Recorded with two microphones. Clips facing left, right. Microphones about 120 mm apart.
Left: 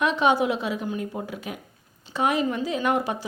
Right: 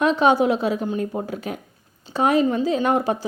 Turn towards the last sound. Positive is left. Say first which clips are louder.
# right 5 dB
turn(degrees=-35)  # may be behind; listen again after turning